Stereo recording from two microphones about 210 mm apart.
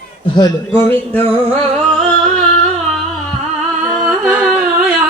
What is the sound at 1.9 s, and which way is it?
Singing, 5° left (ahead or behind).